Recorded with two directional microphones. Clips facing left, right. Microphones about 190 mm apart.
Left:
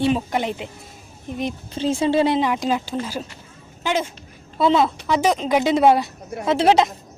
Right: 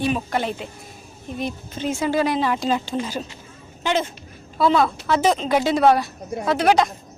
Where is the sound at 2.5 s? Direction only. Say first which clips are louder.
Even; 10° left (ahead or behind).